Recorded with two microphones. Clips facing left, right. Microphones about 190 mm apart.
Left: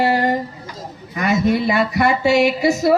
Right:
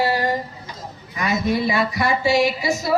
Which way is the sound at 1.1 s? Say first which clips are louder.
Left 4 dB; 55° left (ahead or behind).